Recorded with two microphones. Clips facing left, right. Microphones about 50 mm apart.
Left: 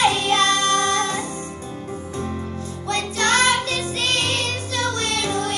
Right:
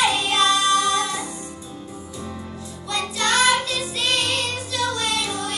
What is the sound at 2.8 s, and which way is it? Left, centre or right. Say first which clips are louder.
Music: left 2 dB; left.